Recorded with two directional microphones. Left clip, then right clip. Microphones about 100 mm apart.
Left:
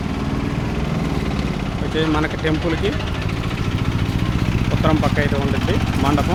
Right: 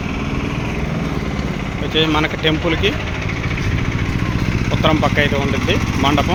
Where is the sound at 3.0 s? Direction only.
20° right (ahead or behind).